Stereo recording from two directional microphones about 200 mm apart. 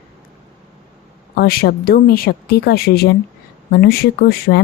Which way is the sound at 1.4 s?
50° left (ahead or behind).